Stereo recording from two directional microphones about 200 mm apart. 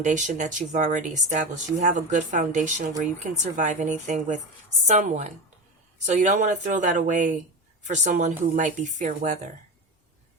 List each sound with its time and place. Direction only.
0.0 s speech: 40° right (ahead or behind)